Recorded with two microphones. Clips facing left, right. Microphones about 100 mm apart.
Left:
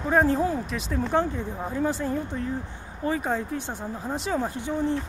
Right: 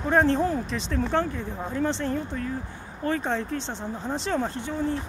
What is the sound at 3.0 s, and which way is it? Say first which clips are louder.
Speech: even; 10° left (ahead or behind).